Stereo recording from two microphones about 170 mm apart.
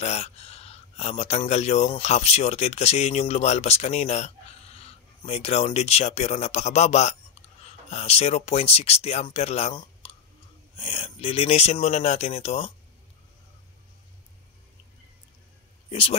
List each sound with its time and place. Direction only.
0.0 s speech: 40° left (ahead or behind)
10.8 s speech: 30° left (ahead or behind)
15.9 s speech: 35° left (ahead or behind)